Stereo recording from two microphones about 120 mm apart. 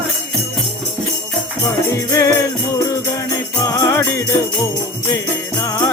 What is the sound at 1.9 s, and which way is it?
Music, 30° left (ahead or behind).